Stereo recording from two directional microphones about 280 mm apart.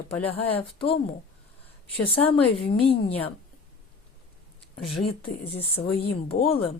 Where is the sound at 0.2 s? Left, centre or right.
Left.